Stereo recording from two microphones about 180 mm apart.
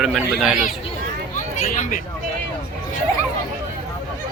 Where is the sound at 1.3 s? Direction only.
45° left (ahead or behind).